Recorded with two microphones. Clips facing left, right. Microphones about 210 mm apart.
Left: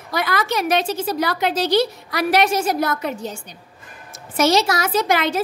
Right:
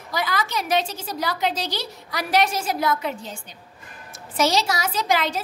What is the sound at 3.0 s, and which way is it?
Speech, 45° left (ahead or behind).